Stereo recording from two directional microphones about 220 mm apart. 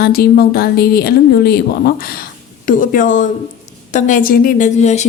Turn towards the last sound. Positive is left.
turn(degrees=30)  # may be behind; listen again after turning